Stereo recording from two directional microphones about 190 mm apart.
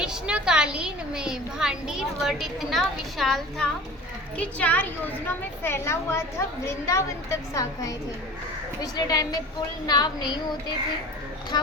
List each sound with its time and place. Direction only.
0.0 s a woman's voice: 5° right (ahead or behind); by 10.2 s 20° left (ahead or behind)